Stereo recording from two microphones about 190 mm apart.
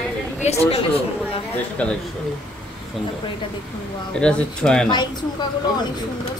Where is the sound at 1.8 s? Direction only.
5° left (ahead or behind).